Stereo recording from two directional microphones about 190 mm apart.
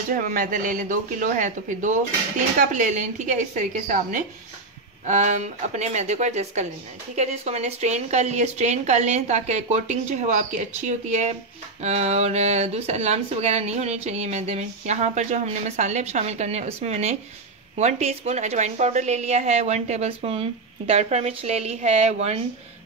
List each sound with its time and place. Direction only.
0.1 s speech: 45° right (ahead or behind)